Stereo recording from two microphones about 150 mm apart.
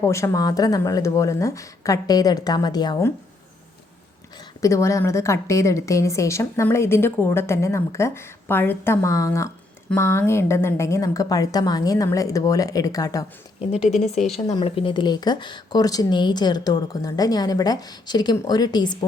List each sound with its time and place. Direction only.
0.0 s a woman's voice: 20° left (ahead or behind)
4.6 s a woman's voice: 20° left (ahead or behind)
13.6 s speech: 45° left (ahead or behind)
14.6 s a woman's voice: 35° left (ahead or behind)